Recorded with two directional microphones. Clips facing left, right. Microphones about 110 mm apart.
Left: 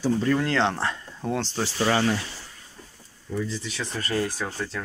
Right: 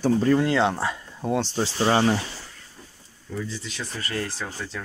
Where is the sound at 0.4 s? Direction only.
15° right (ahead or behind).